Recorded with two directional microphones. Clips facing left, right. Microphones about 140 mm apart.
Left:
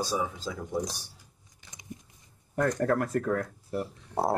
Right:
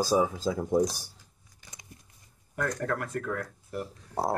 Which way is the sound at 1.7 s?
20° left (ahead or behind).